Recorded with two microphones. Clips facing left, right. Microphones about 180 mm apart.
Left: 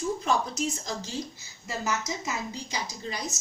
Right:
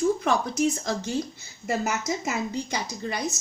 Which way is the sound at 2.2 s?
60° right (ahead or behind).